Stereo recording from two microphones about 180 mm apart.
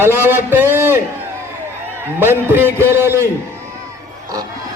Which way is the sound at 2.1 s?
10° right (ahead or behind).